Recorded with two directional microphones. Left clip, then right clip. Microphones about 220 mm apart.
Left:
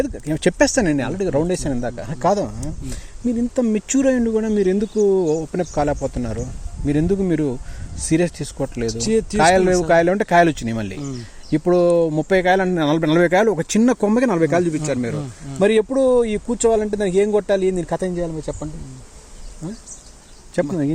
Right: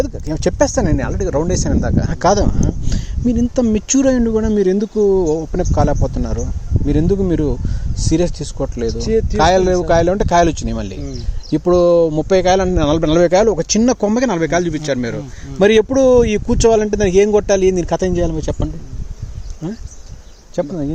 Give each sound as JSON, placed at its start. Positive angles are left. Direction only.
{"t": 0.3, "sound": "speech", "side_deg": 5}
{"t": 2.0, "sound": "speech", "side_deg": -10}
{"t": 2.2, "sound": "a man's voice", "side_deg": -25}
{"t": 3.3, "sound": "speech", "side_deg": -15}
{"t": 9.0, "sound": "speech", "side_deg": 25}
{"t": 9.4, "sound": "speech", "side_deg": -5}
{"t": 15.5, "sound": "a man's voice", "side_deg": -20}
{"t": 20.6, "sound": "speech", "side_deg": 5}